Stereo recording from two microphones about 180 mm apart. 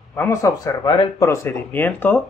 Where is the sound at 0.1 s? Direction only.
15° left (ahead or behind).